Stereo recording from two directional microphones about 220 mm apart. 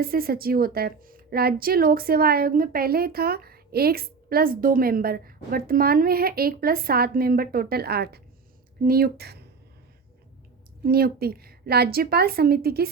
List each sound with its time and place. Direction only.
0.0 s a woman's voice: 40° right (ahead or behind)
10.8 s a woman's voice: 45° right (ahead or behind)